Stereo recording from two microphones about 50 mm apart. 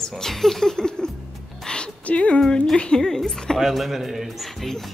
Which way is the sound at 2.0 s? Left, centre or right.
Left.